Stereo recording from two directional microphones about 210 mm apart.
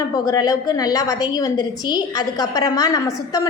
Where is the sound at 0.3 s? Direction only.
15° left (ahead or behind).